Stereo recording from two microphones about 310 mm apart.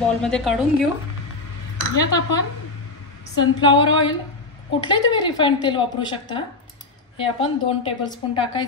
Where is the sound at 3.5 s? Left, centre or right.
Centre.